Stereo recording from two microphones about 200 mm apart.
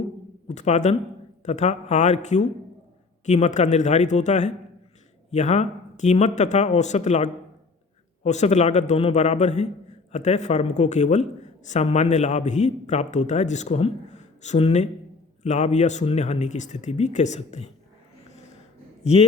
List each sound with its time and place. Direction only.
0.4 s a man's voice: 35° left (ahead or behind)